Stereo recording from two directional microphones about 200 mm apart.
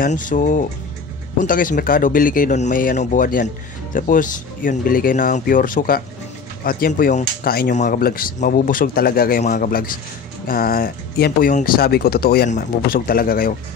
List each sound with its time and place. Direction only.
0.0 s speech: 40° left (ahead or behind)